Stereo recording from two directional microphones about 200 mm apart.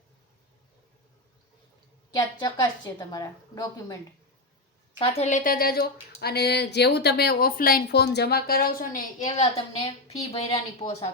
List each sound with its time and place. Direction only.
2.0 s a woman's voice: 20° left (ahead or behind)
4.9 s a woman's voice: 30° left (ahead or behind)